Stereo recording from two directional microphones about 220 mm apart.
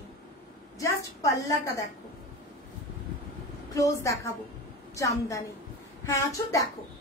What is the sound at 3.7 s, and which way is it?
A woman's voice, 15° left (ahead or behind).